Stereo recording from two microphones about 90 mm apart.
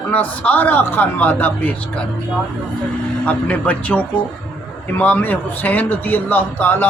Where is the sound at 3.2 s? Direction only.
15° left (ahead or behind).